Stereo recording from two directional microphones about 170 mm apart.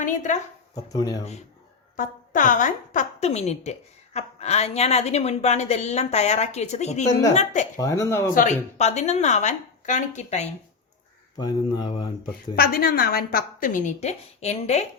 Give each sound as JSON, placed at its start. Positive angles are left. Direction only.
{"t": 0.0, "sound": "a woman's voice", "side_deg": 45}
{"t": 0.8, "sound": "speech", "side_deg": 20}
{"t": 1.2, "sound": "a woman's voice", "side_deg": 40}
{"t": 7.8, "sound": "speech", "side_deg": 20}
{"t": 8.4, "sound": "a woman's voice", "side_deg": 45}
{"t": 11.3, "sound": "speech", "side_deg": 25}
{"t": 12.5, "sound": "a woman's voice", "side_deg": 60}